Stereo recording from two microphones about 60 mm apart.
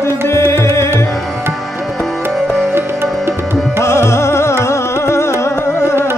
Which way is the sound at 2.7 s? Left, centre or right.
Right.